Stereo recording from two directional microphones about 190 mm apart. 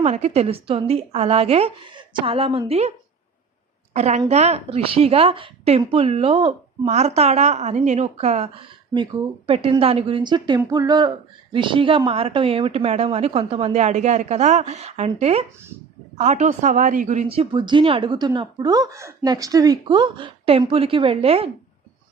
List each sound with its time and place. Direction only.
0.0 s a woman's voice: 35° right (ahead or behind)
3.9 s a woman's voice: 35° right (ahead or behind)
9.5 s a woman's voice: 30° right (ahead or behind)